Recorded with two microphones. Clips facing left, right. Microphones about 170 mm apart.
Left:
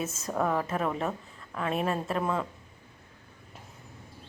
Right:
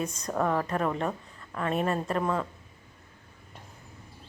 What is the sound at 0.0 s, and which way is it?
A woman's voice, 5° left (ahead or behind).